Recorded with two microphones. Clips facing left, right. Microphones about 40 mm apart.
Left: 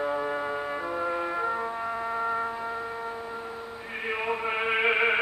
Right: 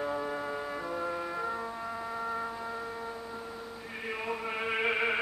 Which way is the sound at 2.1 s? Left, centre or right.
Left.